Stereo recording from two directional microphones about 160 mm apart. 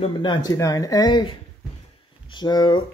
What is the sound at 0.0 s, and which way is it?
Speech, 30° left (ahead or behind).